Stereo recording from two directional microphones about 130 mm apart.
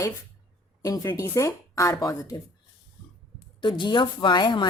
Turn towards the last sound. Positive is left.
turn(degrees=35)  # may be behind; listen again after turning